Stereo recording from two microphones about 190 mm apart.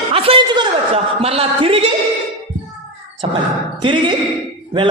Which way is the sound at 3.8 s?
25° right (ahead or behind).